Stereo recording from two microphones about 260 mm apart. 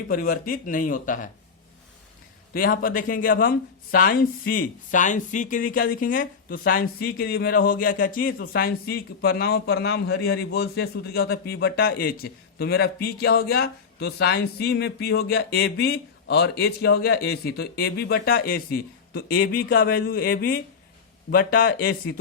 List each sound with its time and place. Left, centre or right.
0.1 s speech: left
2.5 s speech: left